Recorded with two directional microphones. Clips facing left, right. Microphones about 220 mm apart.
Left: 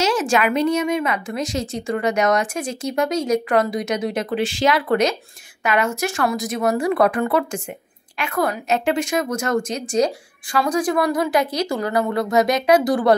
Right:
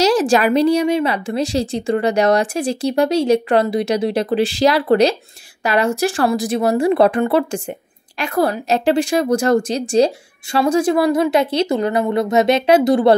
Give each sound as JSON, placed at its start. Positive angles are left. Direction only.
{"t": 0.0, "sound": "a woman's voice", "side_deg": -35}